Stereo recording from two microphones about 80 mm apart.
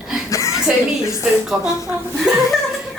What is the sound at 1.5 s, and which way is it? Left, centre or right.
Speech, centre.